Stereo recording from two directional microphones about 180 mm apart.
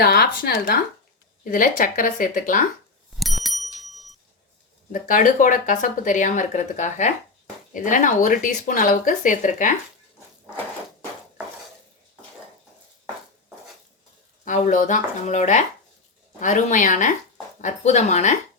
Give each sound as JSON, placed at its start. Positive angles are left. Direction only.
{"t": 0.0, "sound": "speech", "side_deg": 60}
{"t": 3.2, "sound": "bicycle bell", "side_deg": 0}
{"t": 4.9, "sound": "speech", "side_deg": 45}
{"t": 14.4, "sound": "speech", "side_deg": 45}